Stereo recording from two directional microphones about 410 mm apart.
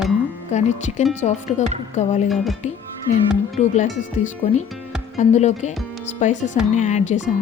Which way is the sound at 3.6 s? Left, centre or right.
Centre.